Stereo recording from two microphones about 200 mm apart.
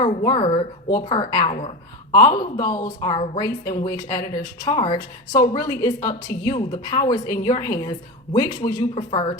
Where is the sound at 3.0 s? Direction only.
20° left (ahead or behind).